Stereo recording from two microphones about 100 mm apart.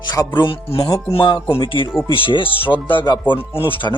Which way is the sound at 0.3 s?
60° left (ahead or behind).